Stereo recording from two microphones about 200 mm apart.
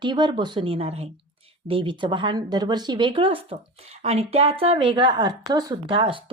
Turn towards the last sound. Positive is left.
turn(degrees=-25)  # may be behind; listen again after turning